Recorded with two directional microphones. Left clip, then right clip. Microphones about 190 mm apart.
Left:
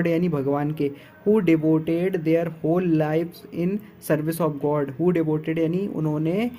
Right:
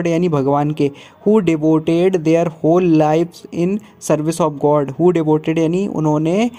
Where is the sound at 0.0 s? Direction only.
40° right (ahead or behind).